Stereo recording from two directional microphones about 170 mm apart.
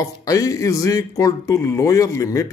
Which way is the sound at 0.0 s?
20° left (ahead or behind).